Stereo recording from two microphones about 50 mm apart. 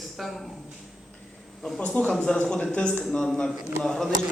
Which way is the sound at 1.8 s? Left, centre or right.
Left.